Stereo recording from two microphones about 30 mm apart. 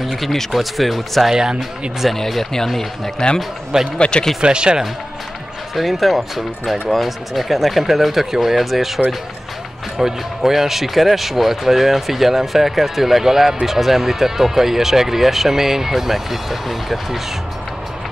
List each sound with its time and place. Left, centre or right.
0.0 s speech: centre
1.3 s speech: right
2.1 s speech: centre
3.2 s speech: left
3.7 s speech: right
5.8 s speech: centre